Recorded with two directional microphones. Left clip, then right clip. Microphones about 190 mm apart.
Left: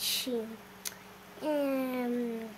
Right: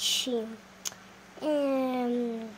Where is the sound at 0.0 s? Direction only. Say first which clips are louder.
Right 4 dB; 10° right (ahead or behind).